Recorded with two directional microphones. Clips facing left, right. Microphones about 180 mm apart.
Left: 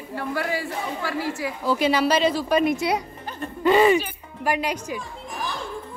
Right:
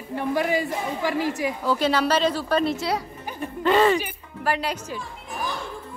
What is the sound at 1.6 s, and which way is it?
Speech, 10° left (ahead or behind).